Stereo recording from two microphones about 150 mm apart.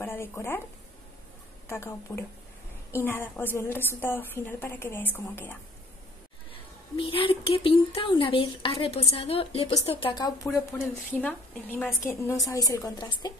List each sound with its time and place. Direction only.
0.0 s a woman's voice: 15° left (ahead or behind)
1.7 s a woman's voice: 15° left (ahead or behind)
7.0 s speech: 35° left (ahead or behind)
11.1 s a woman's voice: 10° left (ahead or behind); by 13.3 s 25° left (ahead or behind)